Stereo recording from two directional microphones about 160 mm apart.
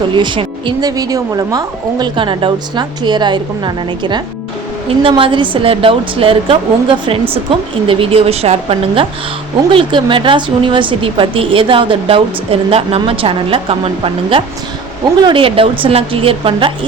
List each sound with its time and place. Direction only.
0.1 s a woman's voice: 30° right (ahead or behind)